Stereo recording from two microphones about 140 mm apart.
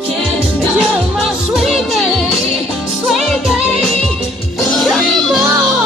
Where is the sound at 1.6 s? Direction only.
Centre (ahead or behind).